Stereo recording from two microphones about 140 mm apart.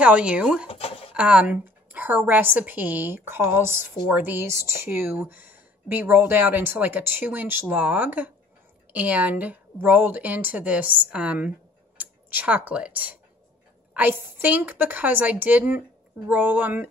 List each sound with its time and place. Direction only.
0.0 s a woman's voice: 10° right (ahead or behind)
0.7 s a sound: 45° left (ahead or behind)
1.1 s a woman's voice: 10° right (ahead or behind)